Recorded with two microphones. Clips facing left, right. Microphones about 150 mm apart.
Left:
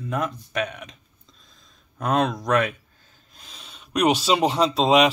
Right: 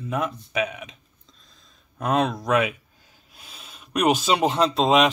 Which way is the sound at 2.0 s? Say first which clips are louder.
Even; centre (ahead or behind).